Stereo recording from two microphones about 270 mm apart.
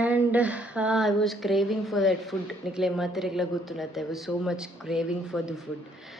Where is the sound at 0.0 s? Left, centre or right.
Centre.